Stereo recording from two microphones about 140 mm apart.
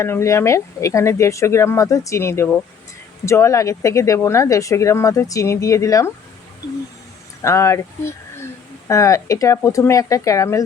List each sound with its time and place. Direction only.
0.0 s speech: 20° left (ahead or behind)
7.4 s speech: 20° left (ahead or behind)